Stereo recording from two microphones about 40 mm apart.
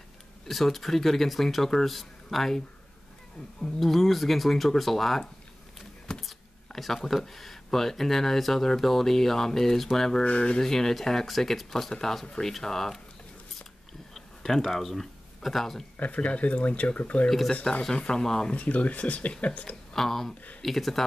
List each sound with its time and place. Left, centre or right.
0.5 s speech: centre
3.8 s speech: centre
6.1 s a sound: centre
6.7 s speech: centre
10.2 s a sound: left
10.6 s speech: centre
14.1 s speech: centre
16.0 s speech: left
17.3 s speech: centre
17.9 s a sound: left
18.2 s speech: centre
18.5 s speech: left
19.9 s speech: centre